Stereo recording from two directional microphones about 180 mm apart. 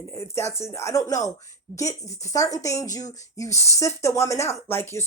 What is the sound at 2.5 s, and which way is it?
Speech, 20° left (ahead or behind).